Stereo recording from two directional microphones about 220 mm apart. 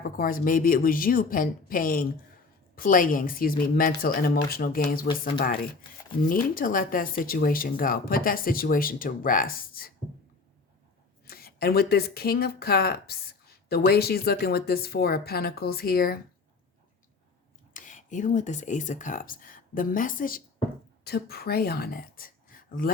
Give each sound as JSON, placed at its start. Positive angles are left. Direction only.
{"t": 0.0, "sound": "speech", "side_deg": 40}
{"t": 6.2, "sound": "speech", "side_deg": 40}
{"t": 11.3, "sound": "speech", "side_deg": 45}
{"t": 17.7, "sound": "speech", "side_deg": 35}